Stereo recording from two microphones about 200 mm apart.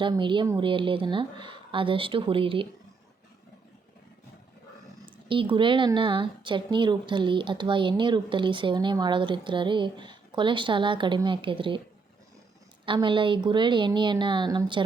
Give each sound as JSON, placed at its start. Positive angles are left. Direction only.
{"t": 0.0, "sound": "speech", "side_deg": -25}
{"t": 5.3, "sound": "speech", "side_deg": -25}
{"t": 12.8, "sound": "speech", "side_deg": -25}